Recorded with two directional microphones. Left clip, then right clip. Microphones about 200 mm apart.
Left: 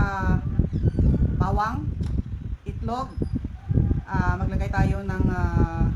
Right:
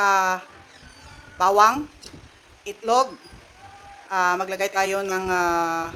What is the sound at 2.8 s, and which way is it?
Speech, 55° right (ahead or behind).